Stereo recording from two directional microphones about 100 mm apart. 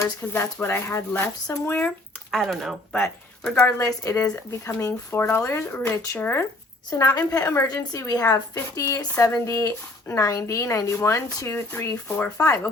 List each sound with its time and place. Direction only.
0.0 s speech: 25° left (ahead or behind)
2.3 s speech: centre (ahead or behind)
3.5 s speech: 20° left (ahead or behind)
3.8 s speech: 35° left (ahead or behind); by 6.4 s 20° left (ahead or behind)
6.9 s speech: 35° left (ahead or behind)
7.4 s speech: 25° left (ahead or behind)
7.7 s speech: 35° left (ahead or behind); by 12.5 s 20° left (ahead or behind)